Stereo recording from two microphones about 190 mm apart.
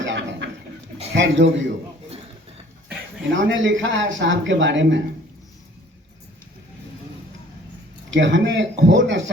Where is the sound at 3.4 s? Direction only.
75° right (ahead or behind).